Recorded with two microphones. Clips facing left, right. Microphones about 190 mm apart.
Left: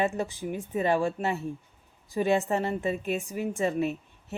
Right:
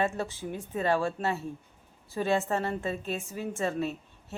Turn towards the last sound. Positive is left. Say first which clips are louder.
# left 4 dB
turn(degrees=15)  # may be behind; listen again after turning